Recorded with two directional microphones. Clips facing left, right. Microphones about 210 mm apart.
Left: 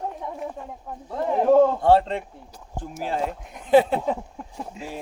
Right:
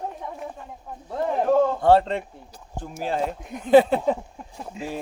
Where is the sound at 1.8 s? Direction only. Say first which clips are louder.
Right 1 dB; 35° right (ahead or behind).